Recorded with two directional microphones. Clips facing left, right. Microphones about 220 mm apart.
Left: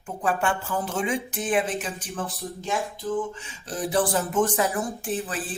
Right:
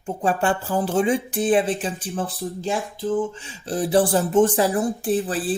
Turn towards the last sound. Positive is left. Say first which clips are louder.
# right 8 dB
turn(degrees=-35)  # may be behind; listen again after turning